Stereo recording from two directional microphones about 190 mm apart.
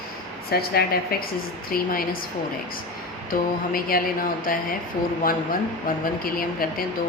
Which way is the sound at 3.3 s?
50° left (ahead or behind).